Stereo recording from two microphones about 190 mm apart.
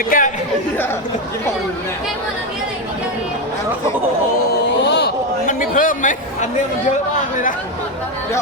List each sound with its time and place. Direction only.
0.1 s speech: 45° left (ahead or behind)
4.8 s a sound: 60° left (ahead or behind)
5.5 s chatter: 45° left (ahead or behind)